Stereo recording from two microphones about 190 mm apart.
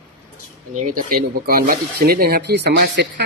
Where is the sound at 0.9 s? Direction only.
50° right (ahead or behind).